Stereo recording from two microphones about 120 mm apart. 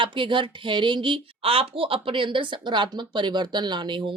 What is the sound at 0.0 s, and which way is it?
A woman's voice, 45° right (ahead or behind).